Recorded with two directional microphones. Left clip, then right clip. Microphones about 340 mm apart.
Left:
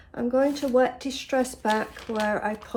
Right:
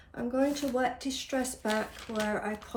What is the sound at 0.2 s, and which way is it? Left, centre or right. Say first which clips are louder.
Speech: left 6 dB; left.